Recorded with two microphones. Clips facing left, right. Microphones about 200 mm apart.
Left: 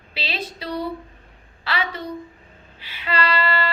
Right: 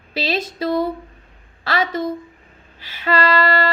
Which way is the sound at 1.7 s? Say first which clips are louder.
Right 6 dB; 45° right (ahead or behind).